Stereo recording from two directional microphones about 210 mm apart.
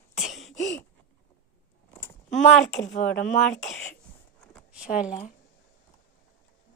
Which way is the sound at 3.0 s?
5° left (ahead or behind).